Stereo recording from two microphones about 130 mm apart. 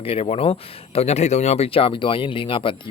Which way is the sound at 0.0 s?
50° left (ahead or behind).